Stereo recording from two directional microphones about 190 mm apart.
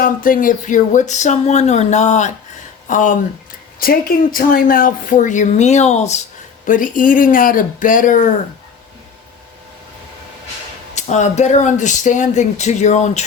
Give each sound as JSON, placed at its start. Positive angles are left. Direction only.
{"t": 0.0, "sound": "speech", "side_deg": 45}
{"t": 10.9, "sound": "speech", "side_deg": 40}